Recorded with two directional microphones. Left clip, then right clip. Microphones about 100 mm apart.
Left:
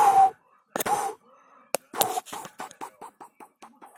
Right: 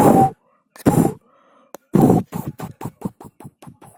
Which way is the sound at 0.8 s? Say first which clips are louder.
Right 9 dB; 35° right (ahead or behind).